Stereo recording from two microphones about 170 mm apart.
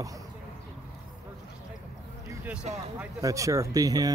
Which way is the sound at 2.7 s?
45° right (ahead or behind).